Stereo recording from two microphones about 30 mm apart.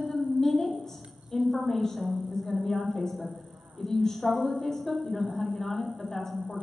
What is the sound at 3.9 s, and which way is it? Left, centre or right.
Speech, centre.